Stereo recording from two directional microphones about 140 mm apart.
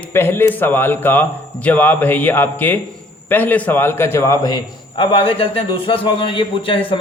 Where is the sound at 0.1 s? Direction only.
15° left (ahead or behind).